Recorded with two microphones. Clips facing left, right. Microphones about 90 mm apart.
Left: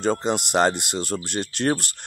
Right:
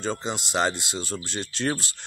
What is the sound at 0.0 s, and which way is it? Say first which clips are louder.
Speech: left 7 dB; 60° left (ahead or behind).